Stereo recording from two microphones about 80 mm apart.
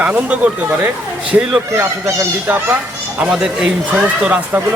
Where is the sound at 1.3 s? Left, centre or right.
Right.